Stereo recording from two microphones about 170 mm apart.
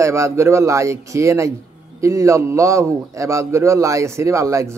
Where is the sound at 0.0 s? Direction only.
15° right (ahead or behind).